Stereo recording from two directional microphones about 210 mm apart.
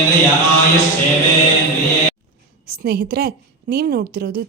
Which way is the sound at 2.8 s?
45° right (ahead or behind).